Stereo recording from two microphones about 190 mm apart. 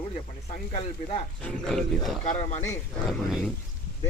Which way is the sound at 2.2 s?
40° left (ahead or behind).